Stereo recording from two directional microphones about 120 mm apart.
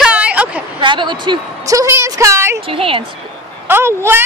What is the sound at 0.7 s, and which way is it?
Speech, 40° right (ahead or behind).